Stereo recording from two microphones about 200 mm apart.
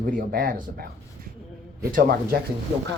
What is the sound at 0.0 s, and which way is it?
Speech, 45° right (ahead or behind).